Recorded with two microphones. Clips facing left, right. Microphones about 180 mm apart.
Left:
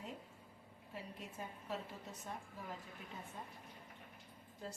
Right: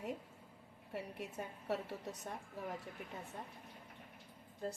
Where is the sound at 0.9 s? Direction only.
70° right (ahead or behind).